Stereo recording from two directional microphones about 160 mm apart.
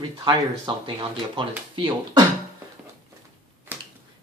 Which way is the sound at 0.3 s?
30° right (ahead or behind).